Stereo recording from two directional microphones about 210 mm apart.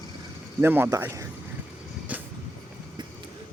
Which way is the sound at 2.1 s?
5° right (ahead or behind).